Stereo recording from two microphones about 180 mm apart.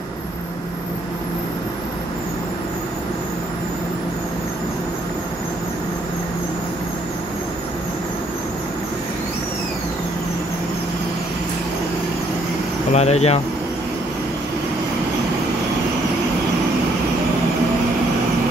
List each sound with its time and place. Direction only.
12.9 s speech: 35° left (ahead or behind)